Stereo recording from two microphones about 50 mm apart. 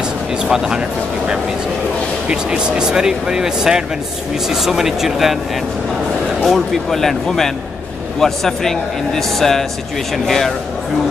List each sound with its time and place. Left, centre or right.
0.0 s speech: centre
6.4 s speech: centre